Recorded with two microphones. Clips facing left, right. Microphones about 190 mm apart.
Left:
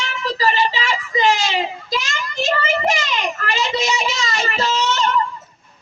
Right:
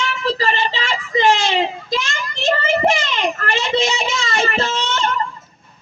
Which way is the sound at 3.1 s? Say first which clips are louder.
Right 2 dB; 55° right (ahead or behind).